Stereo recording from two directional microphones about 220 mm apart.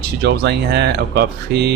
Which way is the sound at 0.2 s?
50° right (ahead or behind).